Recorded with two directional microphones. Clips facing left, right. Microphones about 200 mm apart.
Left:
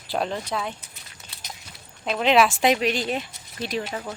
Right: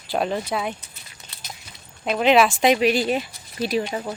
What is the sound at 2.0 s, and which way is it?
Speech, 5° right (ahead or behind).